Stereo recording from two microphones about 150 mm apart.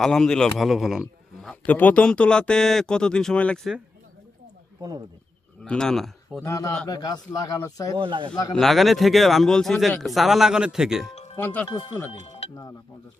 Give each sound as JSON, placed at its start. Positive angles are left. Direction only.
{"t": 0.0, "sound": "a man's voice", "side_deg": 5}
{"t": 4.8, "sound": "speech", "side_deg": -25}
{"t": 5.6, "sound": "speech", "side_deg": 5}
{"t": 6.4, "sound": "a man's voice", "side_deg": 20}
{"t": 7.9, "sound": "speech", "side_deg": -35}
{"t": 8.5, "sound": "a man's voice", "side_deg": 0}
{"t": 11.1, "sound": "music", "side_deg": 45}
{"t": 11.3, "sound": "speech", "side_deg": 15}